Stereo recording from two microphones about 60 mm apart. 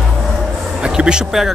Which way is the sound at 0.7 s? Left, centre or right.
Centre.